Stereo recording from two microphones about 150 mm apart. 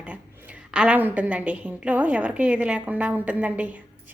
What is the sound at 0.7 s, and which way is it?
A woman's voice, 10° right (ahead or behind).